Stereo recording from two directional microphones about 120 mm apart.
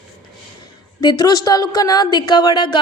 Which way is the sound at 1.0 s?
35° left (ahead or behind).